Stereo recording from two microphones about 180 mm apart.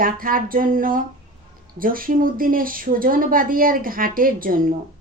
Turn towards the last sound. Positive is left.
turn(degrees=-50)  # may be behind; listen again after turning